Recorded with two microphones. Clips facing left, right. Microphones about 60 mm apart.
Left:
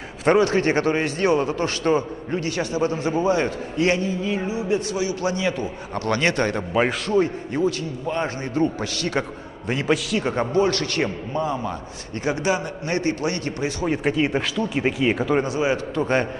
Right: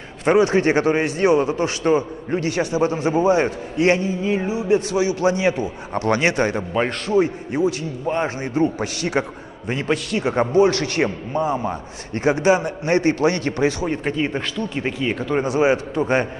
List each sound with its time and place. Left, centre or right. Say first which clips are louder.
0.4 s a man's voice: right 3 dB; right
6.7 s a man's voice: even; centre
7.2 s a man's voice: right 3 dB; centre
9.7 s a man's voice: even; centre
10.6 s a man's voice: right 4 dB; right
13.8 s speech: left 1 dB; centre
15.4 s a man's voice: right 4 dB; right
16.0 s a man's voice: left 1 dB; centre